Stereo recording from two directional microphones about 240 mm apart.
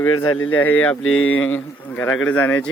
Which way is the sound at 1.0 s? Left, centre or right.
Left.